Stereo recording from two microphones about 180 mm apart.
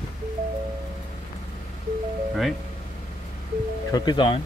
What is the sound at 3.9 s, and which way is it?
Speech, 25° left (ahead or behind).